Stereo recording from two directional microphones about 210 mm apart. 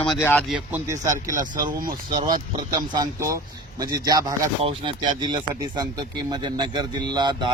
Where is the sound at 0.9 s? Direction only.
15° right (ahead or behind).